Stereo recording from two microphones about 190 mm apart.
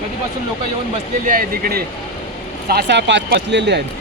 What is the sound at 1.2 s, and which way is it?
Speech, 45° right (ahead or behind).